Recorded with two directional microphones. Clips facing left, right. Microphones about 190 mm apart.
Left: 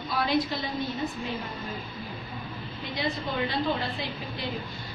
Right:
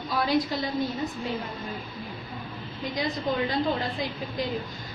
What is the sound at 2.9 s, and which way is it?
Speech, 40° right (ahead or behind).